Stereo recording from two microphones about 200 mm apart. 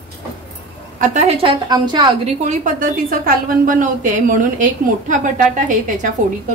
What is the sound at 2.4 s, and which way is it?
A woman's voice, 40° right (ahead or behind).